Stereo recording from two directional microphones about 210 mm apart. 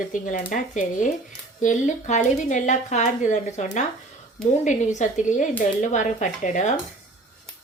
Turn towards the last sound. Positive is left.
turn(degrees=35)  # may be behind; listen again after turning